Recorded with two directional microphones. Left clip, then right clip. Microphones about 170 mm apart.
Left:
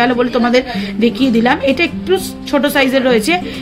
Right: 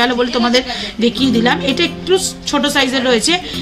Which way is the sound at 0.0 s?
40° left (ahead or behind).